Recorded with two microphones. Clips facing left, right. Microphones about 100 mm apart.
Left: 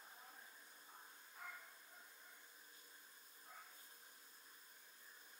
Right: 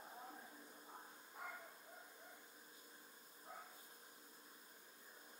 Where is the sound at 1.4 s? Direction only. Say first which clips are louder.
Right 3 dB; 15° right (ahead or behind).